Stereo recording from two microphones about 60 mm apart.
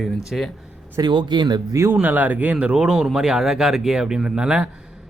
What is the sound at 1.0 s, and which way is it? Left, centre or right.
Speech, right.